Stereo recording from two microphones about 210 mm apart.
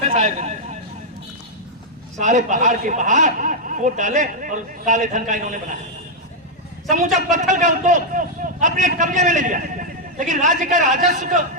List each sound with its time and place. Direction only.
0.1 s a sound: 35° right (ahead or behind)
2.1 s a man's voice: 35° right (ahead or behind)
7.3 s a man's voice: 35° right (ahead or behind)